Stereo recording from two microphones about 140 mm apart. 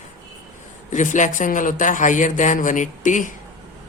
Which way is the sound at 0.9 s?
65° left (ahead or behind).